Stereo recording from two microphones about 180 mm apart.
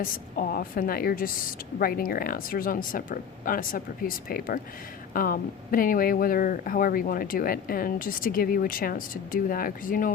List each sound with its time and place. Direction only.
0.0 s speech: 55° left (ahead or behind)